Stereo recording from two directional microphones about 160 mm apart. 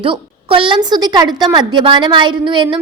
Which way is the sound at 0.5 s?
35° right (ahead or behind).